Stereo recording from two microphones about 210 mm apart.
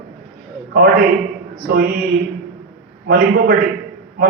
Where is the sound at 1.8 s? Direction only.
45° right (ahead or behind).